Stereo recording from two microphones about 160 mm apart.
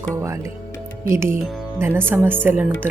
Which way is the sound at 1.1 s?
15° right (ahead or behind).